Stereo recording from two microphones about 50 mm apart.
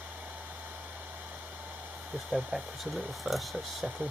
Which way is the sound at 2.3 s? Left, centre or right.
Centre.